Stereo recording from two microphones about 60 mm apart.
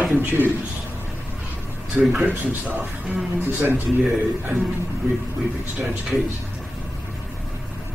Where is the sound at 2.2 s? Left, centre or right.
Right.